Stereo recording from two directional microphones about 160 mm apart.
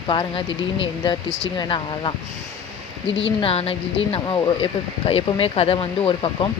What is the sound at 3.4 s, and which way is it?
Speech, 35° left (ahead or behind).